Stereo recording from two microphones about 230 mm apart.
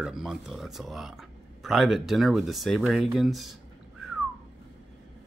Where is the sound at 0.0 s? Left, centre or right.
Centre.